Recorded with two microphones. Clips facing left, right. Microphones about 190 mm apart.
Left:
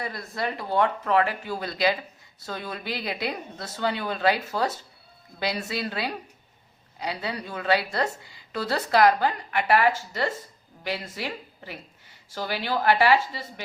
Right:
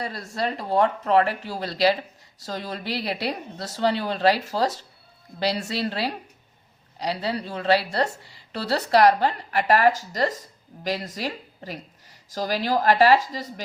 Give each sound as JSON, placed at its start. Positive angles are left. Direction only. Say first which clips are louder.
{"t": 0.0, "sound": "speech", "louder": "right 2 dB", "side_deg": -30}